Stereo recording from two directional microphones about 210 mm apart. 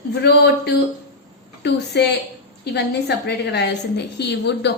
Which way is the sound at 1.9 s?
55° left (ahead or behind).